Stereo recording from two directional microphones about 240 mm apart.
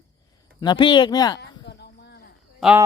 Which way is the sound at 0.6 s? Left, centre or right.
Centre.